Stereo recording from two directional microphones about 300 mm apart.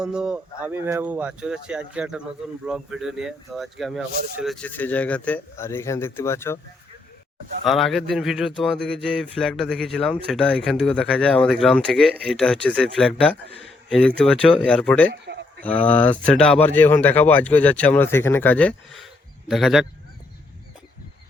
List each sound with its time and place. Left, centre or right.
0.0 s speech: centre
7.6 s speech: centre
15.1 s a sound: right
15.6 s speech: centre